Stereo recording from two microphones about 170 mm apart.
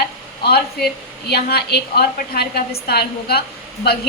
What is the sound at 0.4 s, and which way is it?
A woman's voice, 70° left (ahead or behind).